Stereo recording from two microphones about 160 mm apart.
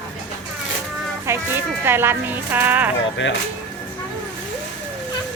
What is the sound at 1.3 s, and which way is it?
A woman's voice, 15° right (ahead or behind).